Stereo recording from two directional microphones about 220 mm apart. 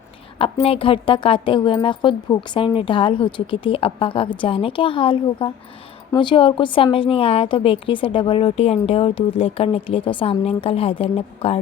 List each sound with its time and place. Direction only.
0.3 s a woman's voice: 25° left (ahead or behind)